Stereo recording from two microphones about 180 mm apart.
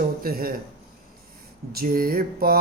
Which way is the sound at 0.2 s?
55° right (ahead or behind).